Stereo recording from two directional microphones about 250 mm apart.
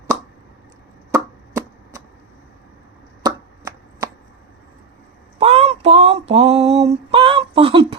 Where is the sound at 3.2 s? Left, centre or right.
Centre.